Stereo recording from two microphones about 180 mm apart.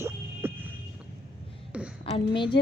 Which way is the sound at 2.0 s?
30° left (ahead or behind).